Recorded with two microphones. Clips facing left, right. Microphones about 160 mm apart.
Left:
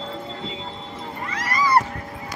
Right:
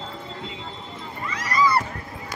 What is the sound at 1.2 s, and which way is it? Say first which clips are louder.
Cat: left 1 dB; 60° left (ahead or behind).